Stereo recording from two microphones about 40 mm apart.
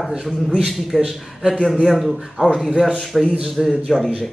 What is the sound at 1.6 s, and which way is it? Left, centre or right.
Speech, centre.